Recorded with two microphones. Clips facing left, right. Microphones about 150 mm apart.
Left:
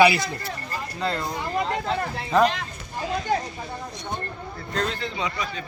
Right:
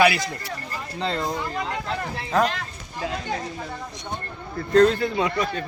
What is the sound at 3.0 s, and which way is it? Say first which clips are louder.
Speech: left 1 dB; 90° right.